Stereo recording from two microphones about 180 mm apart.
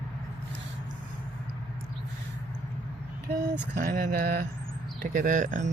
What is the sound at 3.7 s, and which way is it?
Mantra, 60° right (ahead or behind).